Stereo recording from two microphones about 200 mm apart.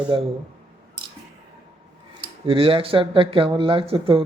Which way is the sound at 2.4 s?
25° right (ahead or behind).